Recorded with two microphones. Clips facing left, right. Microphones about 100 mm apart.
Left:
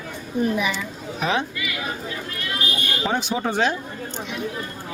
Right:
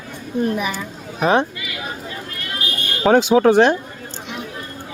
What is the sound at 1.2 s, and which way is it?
Speech, 45° right (ahead or behind).